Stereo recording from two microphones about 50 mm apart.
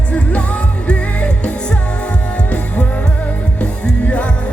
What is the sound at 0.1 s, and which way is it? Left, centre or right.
Music, left.